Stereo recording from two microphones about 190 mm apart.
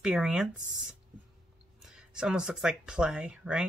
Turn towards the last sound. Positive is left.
turn(degrees=-5)  # may be behind; listen again after turning